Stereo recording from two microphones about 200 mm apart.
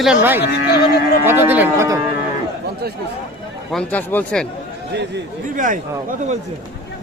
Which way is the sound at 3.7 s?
5° left (ahead or behind).